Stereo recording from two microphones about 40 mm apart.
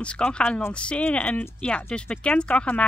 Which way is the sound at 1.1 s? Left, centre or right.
Left.